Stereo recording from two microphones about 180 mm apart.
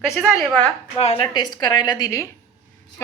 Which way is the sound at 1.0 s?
35° left (ahead or behind).